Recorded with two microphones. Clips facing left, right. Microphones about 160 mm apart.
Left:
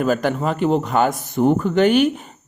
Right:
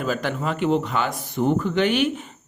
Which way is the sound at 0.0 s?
45° left (ahead or behind).